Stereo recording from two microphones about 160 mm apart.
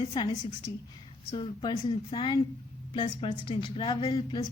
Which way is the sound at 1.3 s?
30° left (ahead or behind).